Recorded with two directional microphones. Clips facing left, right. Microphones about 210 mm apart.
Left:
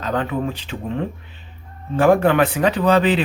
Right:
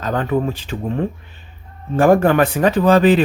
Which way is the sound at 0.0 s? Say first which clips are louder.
Right 3 dB; 45° right (ahead or behind).